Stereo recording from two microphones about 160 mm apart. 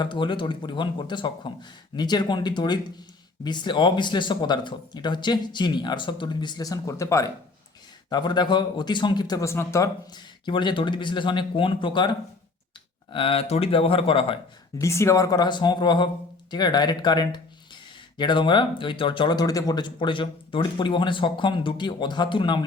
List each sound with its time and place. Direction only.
0.0 s speech: 30° left (ahead or behind)
10.4 s speech: 30° left (ahead or behind)
14.8 s speech: 20° left (ahead or behind)